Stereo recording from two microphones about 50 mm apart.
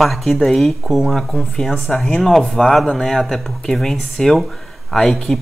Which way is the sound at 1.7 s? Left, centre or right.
Centre.